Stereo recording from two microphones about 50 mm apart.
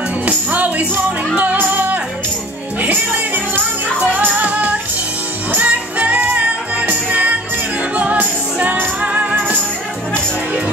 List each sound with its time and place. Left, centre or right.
0.2 s music: right